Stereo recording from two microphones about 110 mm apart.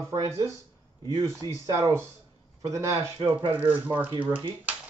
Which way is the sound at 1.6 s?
30° right (ahead or behind).